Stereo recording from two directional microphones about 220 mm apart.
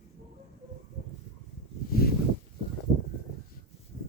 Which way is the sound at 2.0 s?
45° left (ahead or behind).